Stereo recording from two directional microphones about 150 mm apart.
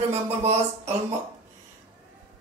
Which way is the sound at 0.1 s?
45° right (ahead or behind).